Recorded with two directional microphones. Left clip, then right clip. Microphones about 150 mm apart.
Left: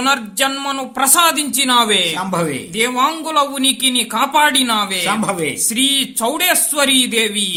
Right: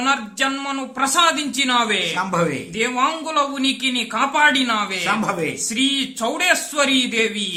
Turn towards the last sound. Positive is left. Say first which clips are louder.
# left 3 dB
turn(degrees=30)  # may be behind; listen again after turning